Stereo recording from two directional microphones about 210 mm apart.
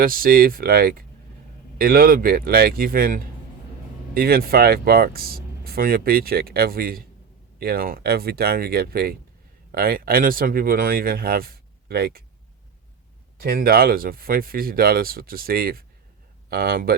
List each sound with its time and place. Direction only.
0.0 s speech: 45° right (ahead or behind)
13.4 s speech: 45° right (ahead or behind)